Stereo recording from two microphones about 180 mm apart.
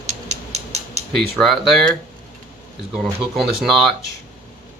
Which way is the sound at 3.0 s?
Centre (ahead or behind).